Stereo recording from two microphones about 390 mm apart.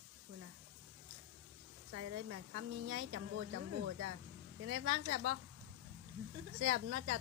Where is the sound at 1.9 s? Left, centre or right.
Right.